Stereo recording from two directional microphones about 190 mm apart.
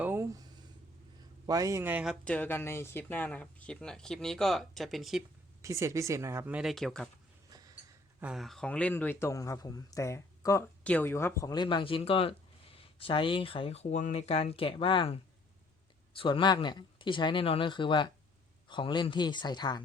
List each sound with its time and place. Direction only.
0.0 s a sound: 15° right (ahead or behind)
1.5 s speech: 20° right (ahead or behind)
2.2 s speech: 5° left (ahead or behind)
5.6 s speech: 15° right (ahead or behind); by 7.1 s centre (ahead or behind)
7.5 s a sound: 20° right (ahead or behind)
8.2 s speech: centre (ahead or behind); by 19.8 s 20° left (ahead or behind)